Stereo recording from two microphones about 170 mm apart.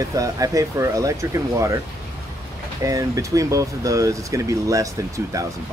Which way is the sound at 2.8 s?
20° right (ahead or behind).